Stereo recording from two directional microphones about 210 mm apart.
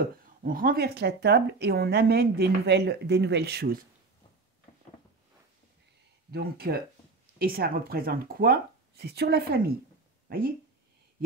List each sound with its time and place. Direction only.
0.2 s speech: 40° right (ahead or behind)
6.3 s speech: 45° right (ahead or behind)